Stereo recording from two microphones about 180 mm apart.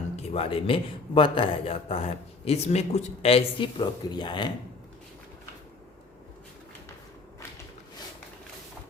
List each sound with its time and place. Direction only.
0.2 s speech: 30° left (ahead or behind)